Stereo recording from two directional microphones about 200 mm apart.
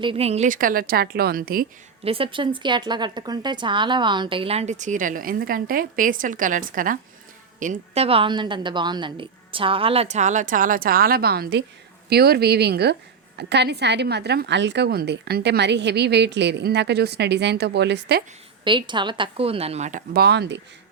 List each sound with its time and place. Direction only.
0.0 s a woman's voice: 30° right (ahead or behind); by 1.6 s 45° right (ahead or behind)
2.0 s a woman's voice: 25° right (ahead or behind); by 18.2 s 60° right (ahead or behind)
18.6 s a woman's voice: 25° right (ahead or behind)
20.1 s a woman's voice: 55° right (ahead or behind)